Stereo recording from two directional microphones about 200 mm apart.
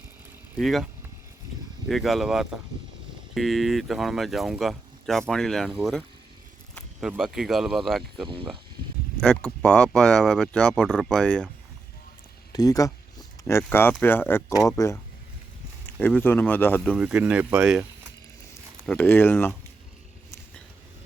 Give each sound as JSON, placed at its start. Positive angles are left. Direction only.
{"t": 0.5, "sound": "speech", "side_deg": 0}
{"t": 1.9, "sound": "speech", "side_deg": 0}
{"t": 7.1, "sound": "speech", "side_deg": -5}
{"t": 12.5, "sound": "a sound", "side_deg": 15}
{"t": 14.0, "sound": "speech", "side_deg": 10}
{"t": 16.0, "sound": "speech", "side_deg": 10}
{"t": 17.1, "sound": "speech", "side_deg": -5}
{"t": 18.9, "sound": "speech", "side_deg": 10}